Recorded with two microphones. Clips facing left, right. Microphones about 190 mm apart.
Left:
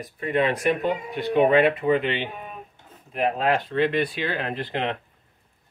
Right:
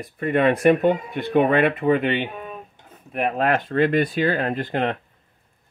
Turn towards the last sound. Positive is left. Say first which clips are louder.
# right 4 dB
turn(degrees=-45)  # may be behind; listen again after turning